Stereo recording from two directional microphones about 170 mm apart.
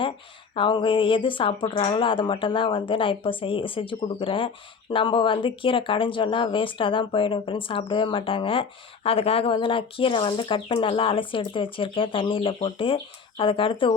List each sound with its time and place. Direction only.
0.5 s speech: 30° left (ahead or behind)